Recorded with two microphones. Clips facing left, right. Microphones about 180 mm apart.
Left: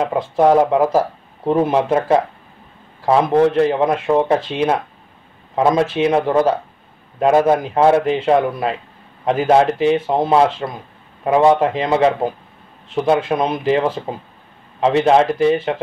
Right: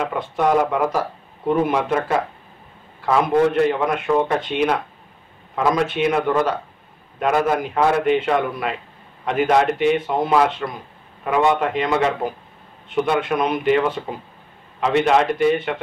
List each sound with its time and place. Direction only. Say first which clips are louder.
0.0 s speech: left 6 dB; 30° left (ahead or behind)